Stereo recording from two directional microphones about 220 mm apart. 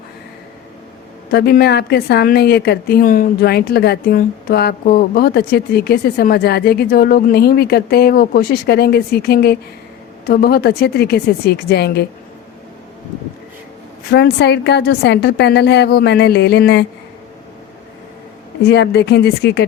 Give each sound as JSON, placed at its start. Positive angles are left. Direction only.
{"t": 1.3, "sound": "a woman's voice", "side_deg": 45}
{"t": 14.1, "sound": "a woman's voice", "side_deg": 50}
{"t": 18.7, "sound": "a woman's voice", "side_deg": 50}